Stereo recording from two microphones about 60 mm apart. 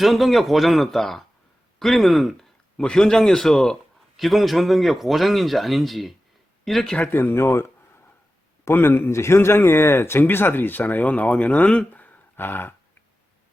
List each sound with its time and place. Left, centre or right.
0.0 s a man's voice: centre
4.2 s speech: centre
7.1 s speech: left
8.7 s speech: left